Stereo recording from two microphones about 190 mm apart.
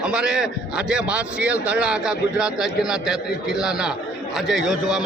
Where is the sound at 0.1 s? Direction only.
5° right (ahead or behind).